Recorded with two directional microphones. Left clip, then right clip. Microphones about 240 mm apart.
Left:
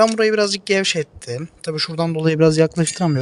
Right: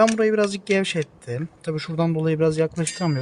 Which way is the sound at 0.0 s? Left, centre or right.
Left.